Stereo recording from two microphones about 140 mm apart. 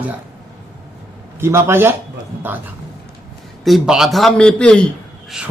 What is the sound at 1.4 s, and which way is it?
Speech, 15° right (ahead or behind).